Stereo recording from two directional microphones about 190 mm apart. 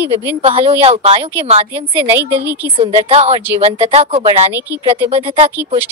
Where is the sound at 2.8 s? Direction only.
35° right (ahead or behind).